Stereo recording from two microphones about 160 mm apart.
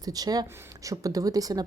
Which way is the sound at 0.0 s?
25° right (ahead or behind).